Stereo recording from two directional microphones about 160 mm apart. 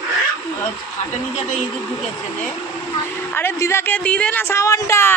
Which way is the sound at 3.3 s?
15° left (ahead or behind).